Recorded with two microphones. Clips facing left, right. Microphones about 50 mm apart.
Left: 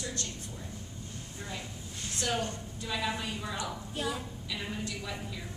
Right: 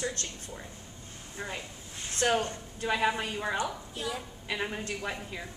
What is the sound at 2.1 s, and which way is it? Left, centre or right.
A woman's voice, right.